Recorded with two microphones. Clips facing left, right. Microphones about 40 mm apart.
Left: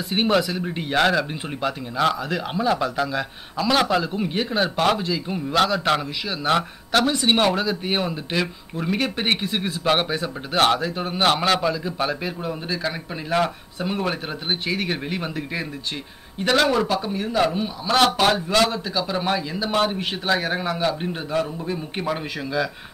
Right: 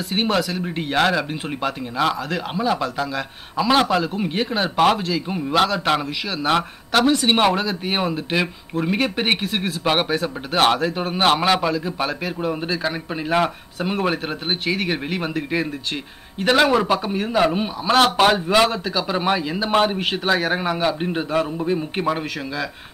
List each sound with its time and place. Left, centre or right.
0.1 s speech: centre
0.7 s speech: centre
0.9 s speech: centre
3.5 s a man's voice: centre
17.5 s a man's voice: right
17.9 s a man's voice: centre
22.0 s speech: centre